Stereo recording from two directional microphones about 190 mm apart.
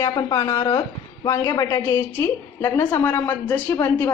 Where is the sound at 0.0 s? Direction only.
20° left (ahead or behind).